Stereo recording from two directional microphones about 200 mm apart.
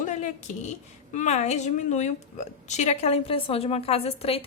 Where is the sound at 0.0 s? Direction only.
35° left (ahead or behind).